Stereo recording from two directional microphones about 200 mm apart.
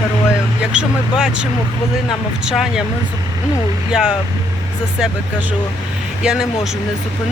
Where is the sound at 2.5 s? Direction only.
5° right (ahead or behind).